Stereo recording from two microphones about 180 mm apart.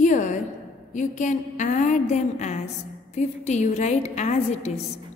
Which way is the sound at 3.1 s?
40° left (ahead or behind).